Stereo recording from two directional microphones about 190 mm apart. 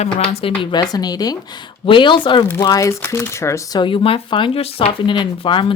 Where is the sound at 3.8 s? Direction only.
30° left (ahead or behind).